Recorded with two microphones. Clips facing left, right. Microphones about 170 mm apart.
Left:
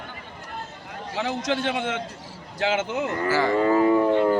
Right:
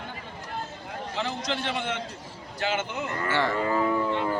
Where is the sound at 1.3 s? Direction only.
90° left.